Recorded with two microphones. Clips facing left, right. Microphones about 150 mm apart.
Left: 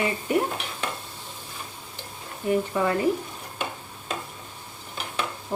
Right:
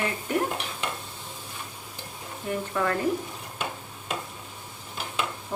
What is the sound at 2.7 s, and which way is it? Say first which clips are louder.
Speech: left 2 dB; 10° left (ahead or behind).